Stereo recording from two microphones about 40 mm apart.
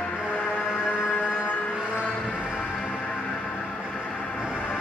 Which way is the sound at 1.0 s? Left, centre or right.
Left.